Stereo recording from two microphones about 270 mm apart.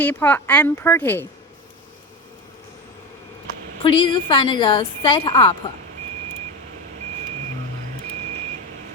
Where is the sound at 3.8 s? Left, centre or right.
Centre.